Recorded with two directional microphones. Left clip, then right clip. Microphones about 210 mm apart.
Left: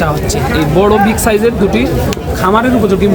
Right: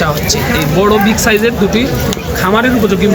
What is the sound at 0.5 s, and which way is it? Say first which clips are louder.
Speech: left 2 dB; 50° left (ahead or behind).